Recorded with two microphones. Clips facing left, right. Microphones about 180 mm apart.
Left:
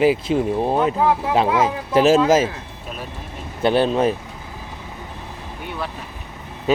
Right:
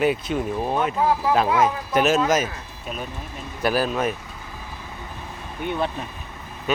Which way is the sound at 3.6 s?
25° left (ahead or behind).